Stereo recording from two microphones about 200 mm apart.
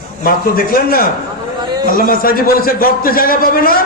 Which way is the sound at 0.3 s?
45° left (ahead or behind).